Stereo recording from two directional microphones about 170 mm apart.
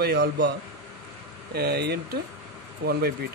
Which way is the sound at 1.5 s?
70° right (ahead or behind).